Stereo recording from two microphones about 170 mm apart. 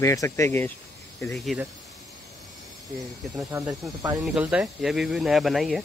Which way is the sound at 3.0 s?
Centre (ahead or behind).